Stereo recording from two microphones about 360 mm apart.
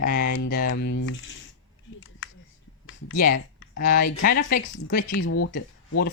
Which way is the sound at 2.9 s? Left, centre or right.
Left.